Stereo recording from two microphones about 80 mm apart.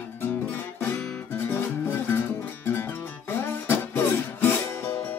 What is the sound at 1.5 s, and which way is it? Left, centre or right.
Music, left.